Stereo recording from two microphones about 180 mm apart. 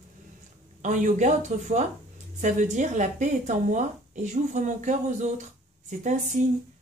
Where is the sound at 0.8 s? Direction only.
45° right (ahead or behind).